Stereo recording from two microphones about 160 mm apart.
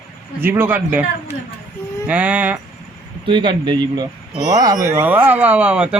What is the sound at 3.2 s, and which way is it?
Speech, 30° right (ahead or behind).